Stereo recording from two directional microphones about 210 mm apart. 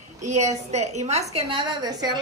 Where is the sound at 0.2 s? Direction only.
35° right (ahead or behind).